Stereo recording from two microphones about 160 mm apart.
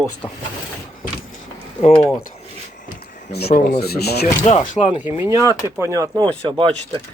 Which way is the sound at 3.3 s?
90° left.